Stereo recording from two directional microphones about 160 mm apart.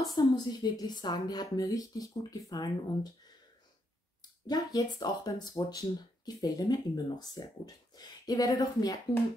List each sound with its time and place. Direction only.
0.0 s speech: 25° left (ahead or behind)
4.5 s speech: 25° left (ahead or behind)